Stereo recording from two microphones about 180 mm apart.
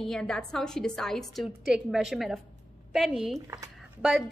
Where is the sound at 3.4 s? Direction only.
15° right (ahead or behind).